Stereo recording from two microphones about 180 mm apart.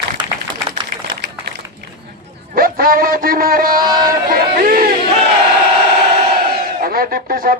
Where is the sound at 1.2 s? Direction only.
80° right.